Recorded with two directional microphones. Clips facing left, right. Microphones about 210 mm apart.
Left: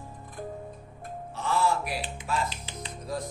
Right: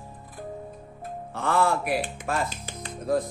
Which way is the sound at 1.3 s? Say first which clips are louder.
Right 3 dB; 55° right (ahead or behind).